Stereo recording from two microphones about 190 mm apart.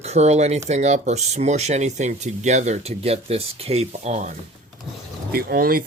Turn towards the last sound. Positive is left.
turn(degrees=-50)  # may be behind; listen again after turning